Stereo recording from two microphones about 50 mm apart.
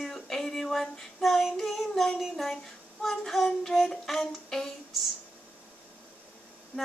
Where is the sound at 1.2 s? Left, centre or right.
Centre.